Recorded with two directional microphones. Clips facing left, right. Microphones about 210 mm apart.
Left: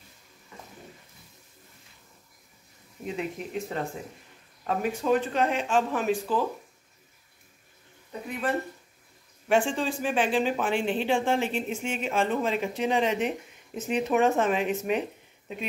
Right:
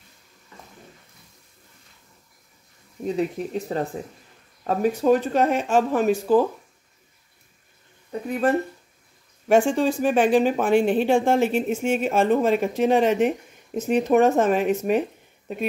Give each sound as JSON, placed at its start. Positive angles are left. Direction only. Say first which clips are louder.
{"t": 3.2, "sound": "speech", "louder": "right 6 dB", "side_deg": -35}
{"t": 8.3, "sound": "speech", "louder": "right 8 dB", "side_deg": -45}